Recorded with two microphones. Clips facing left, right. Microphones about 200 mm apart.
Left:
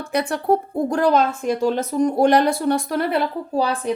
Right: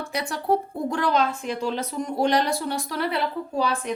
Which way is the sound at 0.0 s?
55° left (ahead or behind).